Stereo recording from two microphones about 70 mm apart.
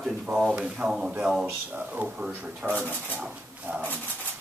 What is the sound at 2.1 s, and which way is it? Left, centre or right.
Speech, centre.